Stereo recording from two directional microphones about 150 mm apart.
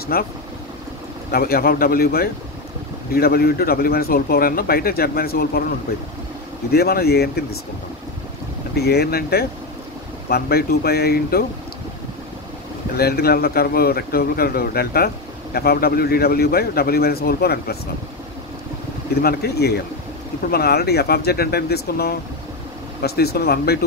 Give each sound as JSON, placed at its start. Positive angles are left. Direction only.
{"t": 0.1, "sound": "speech", "side_deg": 90}
{"t": 1.3, "sound": "speech", "side_deg": 90}
{"t": 6.7, "sound": "speech", "side_deg": 90}
{"t": 8.7, "sound": "speech", "side_deg": 90}
{"t": 12.9, "sound": "speech", "side_deg": 90}
{"t": 19.2, "sound": "speech", "side_deg": 90}